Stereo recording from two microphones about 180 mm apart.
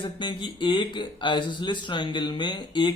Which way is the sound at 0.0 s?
25° left (ahead or behind).